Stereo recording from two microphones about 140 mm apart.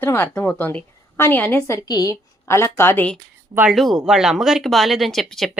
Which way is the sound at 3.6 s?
5° right (ahead or behind).